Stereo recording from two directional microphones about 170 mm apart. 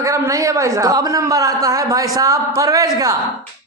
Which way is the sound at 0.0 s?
20° right (ahead or behind).